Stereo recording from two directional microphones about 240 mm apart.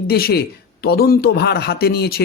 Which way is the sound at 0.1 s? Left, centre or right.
Left.